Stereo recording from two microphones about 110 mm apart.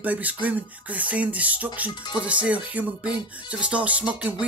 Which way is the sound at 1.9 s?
40° left (ahead or behind).